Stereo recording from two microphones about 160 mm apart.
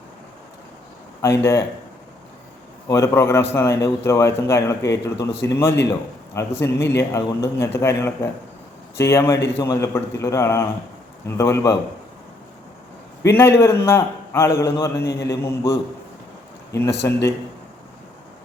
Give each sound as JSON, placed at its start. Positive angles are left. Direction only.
{"t": 1.2, "sound": "a man's voice", "side_deg": 15}
{"t": 2.9, "sound": "a man's voice", "side_deg": 20}
{"t": 13.2, "sound": "a man's voice", "side_deg": 15}
{"t": 16.9, "sound": "a man's voice", "side_deg": 90}